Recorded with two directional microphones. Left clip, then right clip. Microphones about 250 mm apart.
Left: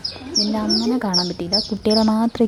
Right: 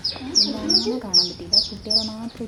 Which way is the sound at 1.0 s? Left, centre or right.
Left.